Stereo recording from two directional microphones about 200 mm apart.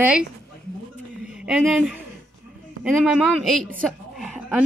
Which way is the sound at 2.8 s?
5° right (ahead or behind).